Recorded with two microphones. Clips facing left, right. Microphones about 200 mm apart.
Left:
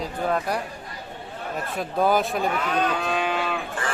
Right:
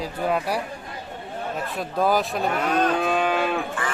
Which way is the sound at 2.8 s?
50° right (ahead or behind).